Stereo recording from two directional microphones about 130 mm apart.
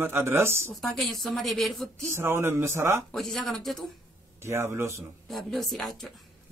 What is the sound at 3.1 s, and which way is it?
Speech, centre (ahead or behind).